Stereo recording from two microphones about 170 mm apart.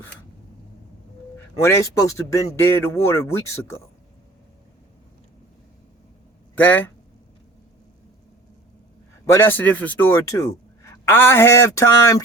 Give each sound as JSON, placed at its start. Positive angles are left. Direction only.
{"t": 1.6, "sound": "speech", "side_deg": 15}
{"t": 6.6, "sound": "speech", "side_deg": 10}
{"t": 9.2, "sound": "speech", "side_deg": 15}